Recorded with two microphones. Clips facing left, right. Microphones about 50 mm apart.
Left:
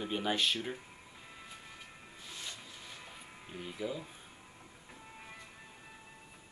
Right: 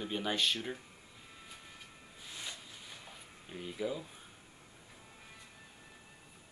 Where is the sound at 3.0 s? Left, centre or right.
Centre.